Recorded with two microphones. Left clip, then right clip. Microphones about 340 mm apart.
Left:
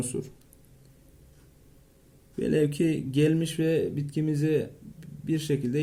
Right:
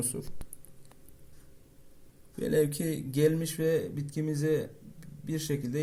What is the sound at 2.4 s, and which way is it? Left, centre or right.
Speech, centre.